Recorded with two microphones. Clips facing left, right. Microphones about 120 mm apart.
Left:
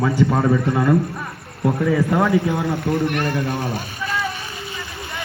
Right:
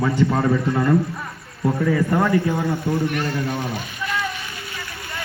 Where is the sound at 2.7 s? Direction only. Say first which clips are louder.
Left 2 dB; 65° left (ahead or behind).